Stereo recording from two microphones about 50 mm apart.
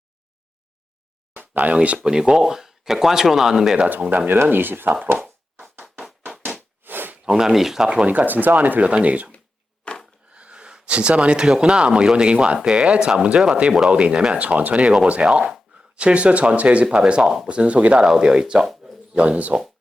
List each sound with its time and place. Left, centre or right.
1.4 s speech: right
2.0 s speech: centre
4.4 s speech: right
5.1 s a sound: right
6.8 s a sound: right
7.3 s speech: centre
8.0 s speech: right
9.8 s a sound: centre
10.3 s speech: centre
14.3 s speech: right
17.2 s speech: centre
17.5 s speech: right
18.0 s speech: centre
19.1 s speech: right